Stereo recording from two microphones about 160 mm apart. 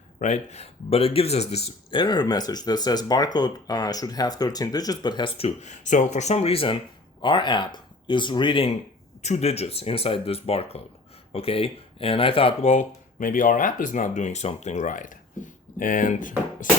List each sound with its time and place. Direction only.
0.2 s speech: 45° left (ahead or behind); by 5.5 s 30° left (ahead or behind)
5.6 s speech: 50° left (ahead or behind); by 8.7 s 30° left (ahead or behind)
9.2 s speech: 45° left (ahead or behind)